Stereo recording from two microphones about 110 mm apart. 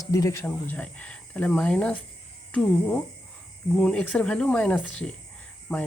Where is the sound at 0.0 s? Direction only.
30° left (ahead or behind).